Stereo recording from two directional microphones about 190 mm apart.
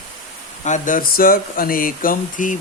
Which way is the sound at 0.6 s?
40° left (ahead or behind).